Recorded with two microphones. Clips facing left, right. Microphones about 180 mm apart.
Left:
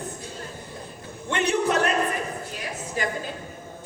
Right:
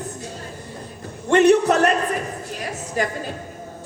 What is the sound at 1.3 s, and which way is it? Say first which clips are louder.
Speech: right 9 dB; 45° right (ahead or behind).